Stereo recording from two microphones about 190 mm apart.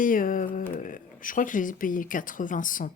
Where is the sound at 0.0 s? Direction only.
45° left (ahead or behind).